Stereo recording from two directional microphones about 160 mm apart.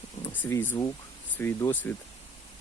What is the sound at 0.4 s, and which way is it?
Speech, 15° left (ahead or behind).